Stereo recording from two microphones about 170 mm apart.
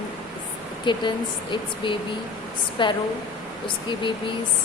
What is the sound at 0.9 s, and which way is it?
Speech, 25° left (ahead or behind).